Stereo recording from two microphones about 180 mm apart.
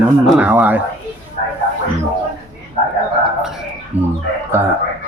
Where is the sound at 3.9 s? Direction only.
10° right (ahead or behind).